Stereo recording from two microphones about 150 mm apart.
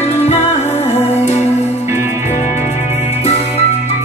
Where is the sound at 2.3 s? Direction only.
50° left (ahead or behind).